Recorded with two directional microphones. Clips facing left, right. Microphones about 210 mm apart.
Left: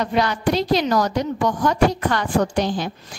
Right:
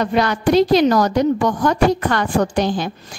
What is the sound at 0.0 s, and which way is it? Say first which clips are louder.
A woman's voice: right 3 dB; 50° right (ahead or behind).